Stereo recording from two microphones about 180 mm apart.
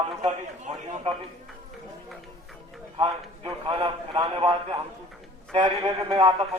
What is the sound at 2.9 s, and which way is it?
A man's voice, 30° right (ahead or behind).